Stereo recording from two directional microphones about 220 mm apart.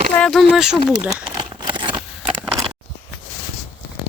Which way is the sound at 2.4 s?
5° right (ahead or behind).